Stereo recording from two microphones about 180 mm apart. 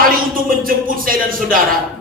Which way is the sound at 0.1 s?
50° right (ahead or behind).